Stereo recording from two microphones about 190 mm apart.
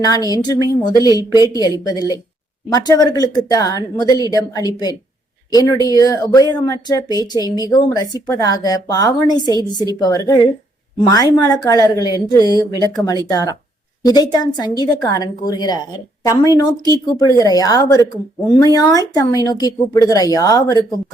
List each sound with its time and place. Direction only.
0.0 s speech: 20° left (ahead or behind)